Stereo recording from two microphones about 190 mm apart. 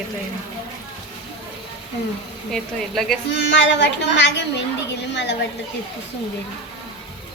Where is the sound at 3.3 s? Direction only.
65° left (ahead or behind).